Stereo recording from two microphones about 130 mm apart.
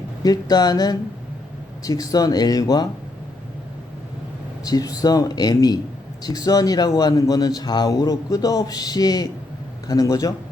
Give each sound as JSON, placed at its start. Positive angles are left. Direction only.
{"t": 0.2, "sound": "a man's voice", "side_deg": 30}
{"t": 4.6, "sound": "a man's voice", "side_deg": 30}